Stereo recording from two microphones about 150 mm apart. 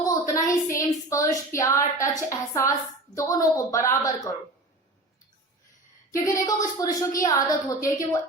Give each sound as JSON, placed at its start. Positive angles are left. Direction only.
{"t": 0.0, "sound": "a sound", "side_deg": 25}
{"t": 1.3, "sound": "a woman's voice", "side_deg": 20}
{"t": 6.1, "sound": "a woman's voice", "side_deg": 25}